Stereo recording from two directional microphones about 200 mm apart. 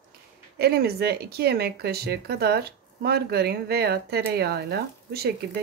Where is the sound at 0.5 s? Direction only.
50° right (ahead or behind).